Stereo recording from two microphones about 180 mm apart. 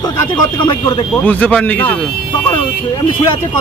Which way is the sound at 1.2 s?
10° left (ahead or behind).